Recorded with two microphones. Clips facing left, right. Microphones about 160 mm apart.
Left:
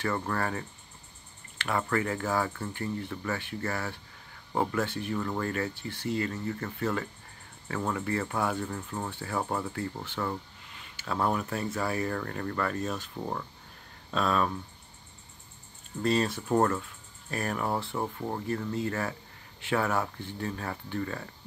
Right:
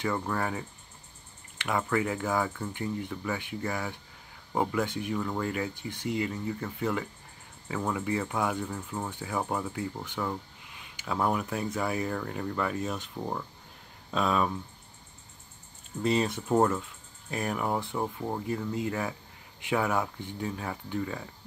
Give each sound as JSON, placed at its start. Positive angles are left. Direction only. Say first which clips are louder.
{"t": 0.0, "sound": "speech", "louder": "even", "side_deg": -10}
{"t": 9.4, "sound": "speech", "louder": "even", "side_deg": 0}
{"t": 9.7, "sound": "speech", "louder": "even", "side_deg": -10}
{"t": 16.0, "sound": "speech", "louder": "even", "side_deg": -20}